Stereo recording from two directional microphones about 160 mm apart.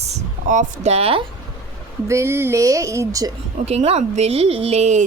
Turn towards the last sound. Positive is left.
turn(degrees=-45)  # may be behind; listen again after turning